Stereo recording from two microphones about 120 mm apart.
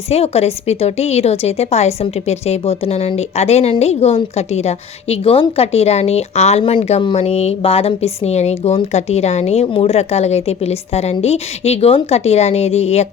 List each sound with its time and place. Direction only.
0.1 s a woman's voice: 55° left (ahead or behind)